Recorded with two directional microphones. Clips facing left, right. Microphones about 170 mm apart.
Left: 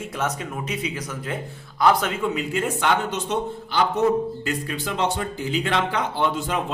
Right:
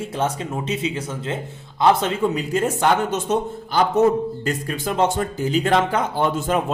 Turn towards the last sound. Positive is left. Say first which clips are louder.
# right 3 dB
turn(degrees=-45)  # may be behind; listen again after turning